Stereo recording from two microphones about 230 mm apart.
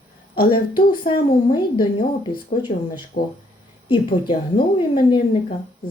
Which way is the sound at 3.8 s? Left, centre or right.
Left.